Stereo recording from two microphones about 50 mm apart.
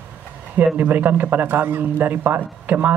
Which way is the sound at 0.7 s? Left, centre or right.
Right.